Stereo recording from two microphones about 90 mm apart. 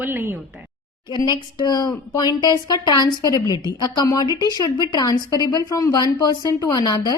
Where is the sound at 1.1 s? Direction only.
55° left (ahead or behind).